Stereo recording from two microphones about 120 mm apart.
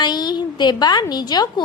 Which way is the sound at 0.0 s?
35° left (ahead or behind).